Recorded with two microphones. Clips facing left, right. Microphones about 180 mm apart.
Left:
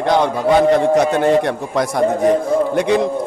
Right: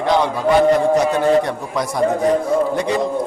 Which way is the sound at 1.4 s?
60° left (ahead or behind).